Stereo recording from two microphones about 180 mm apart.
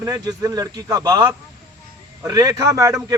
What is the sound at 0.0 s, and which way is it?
A man's voice, 20° right (ahead or behind).